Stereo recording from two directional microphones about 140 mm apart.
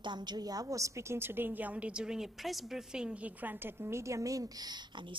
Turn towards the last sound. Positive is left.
turn(degrees=-25)  # may be behind; listen again after turning